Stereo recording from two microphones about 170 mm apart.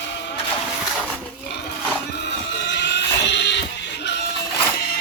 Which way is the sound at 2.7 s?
90° left.